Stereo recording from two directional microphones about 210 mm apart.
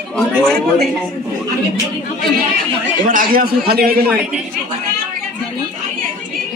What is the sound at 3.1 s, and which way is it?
Speech, 40° right (ahead or behind).